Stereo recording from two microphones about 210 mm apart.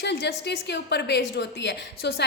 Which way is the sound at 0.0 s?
55° left (ahead or behind).